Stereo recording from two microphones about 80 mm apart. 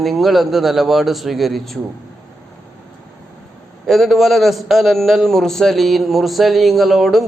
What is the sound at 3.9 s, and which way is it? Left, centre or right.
A man's voice, centre.